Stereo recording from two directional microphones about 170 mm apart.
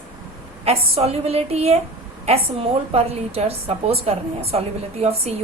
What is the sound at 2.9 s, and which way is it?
A woman's voice, 35° right (ahead or behind).